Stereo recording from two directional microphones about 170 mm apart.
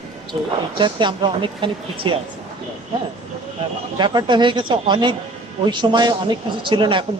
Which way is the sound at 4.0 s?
25° right (ahead or behind).